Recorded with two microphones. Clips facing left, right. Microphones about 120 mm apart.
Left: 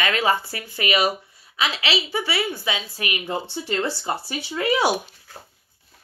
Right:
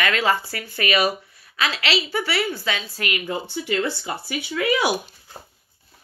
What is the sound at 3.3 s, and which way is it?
Speech, 35° left (ahead or behind).